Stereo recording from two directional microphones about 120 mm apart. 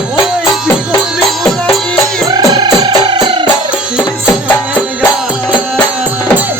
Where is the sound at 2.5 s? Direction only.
40° right (ahead or behind).